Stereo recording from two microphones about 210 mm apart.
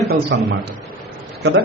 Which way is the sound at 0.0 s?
55° right (ahead or behind).